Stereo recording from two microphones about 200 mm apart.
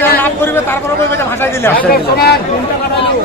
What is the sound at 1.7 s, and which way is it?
Speech, 50° left (ahead or behind).